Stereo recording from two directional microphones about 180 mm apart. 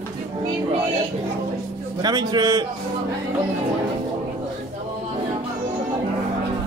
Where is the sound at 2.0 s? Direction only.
25° right (ahead or behind).